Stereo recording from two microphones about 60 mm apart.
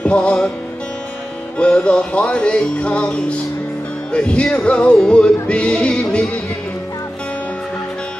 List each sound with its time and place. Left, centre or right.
0.0 s music: centre
1.6 s music: centre